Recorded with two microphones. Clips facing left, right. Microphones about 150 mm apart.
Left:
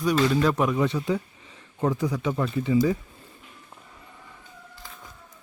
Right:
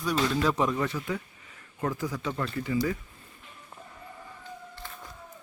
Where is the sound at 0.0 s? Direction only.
Centre (ahead or behind).